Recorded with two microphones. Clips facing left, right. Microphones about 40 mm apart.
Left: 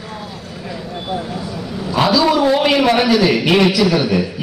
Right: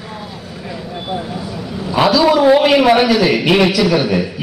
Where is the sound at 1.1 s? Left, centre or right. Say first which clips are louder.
Even; centre.